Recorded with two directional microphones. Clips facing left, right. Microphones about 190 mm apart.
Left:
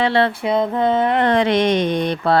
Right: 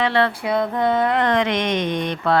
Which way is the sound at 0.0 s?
30° left (ahead or behind).